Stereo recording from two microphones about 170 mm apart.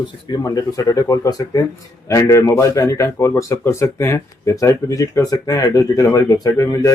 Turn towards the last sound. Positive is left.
turn(degrees=20)  # may be behind; listen again after turning